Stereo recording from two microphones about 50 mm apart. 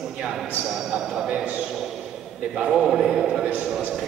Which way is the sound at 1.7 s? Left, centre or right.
Centre.